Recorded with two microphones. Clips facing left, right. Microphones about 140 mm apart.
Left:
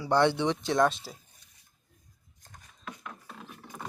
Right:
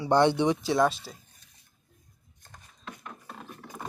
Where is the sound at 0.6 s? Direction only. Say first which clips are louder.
Left 3 dB; 5° right (ahead or behind).